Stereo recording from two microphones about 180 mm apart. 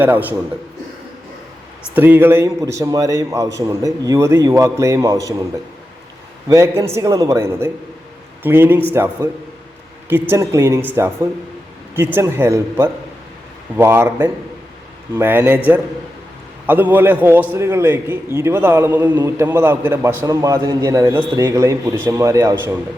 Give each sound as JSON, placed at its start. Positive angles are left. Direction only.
{"t": 0.0, "sound": "a man's voice", "side_deg": -10}
{"t": 2.0, "sound": "a man's voice", "side_deg": -10}
{"t": 6.5, "sound": "a man's voice", "side_deg": -15}